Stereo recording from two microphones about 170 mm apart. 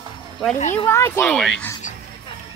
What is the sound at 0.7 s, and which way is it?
Speech, 15° left (ahead or behind).